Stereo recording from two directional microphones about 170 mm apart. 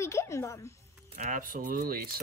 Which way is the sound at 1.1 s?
50° right (ahead or behind).